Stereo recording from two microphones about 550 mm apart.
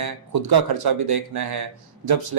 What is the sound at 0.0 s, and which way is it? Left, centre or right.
Speech, right.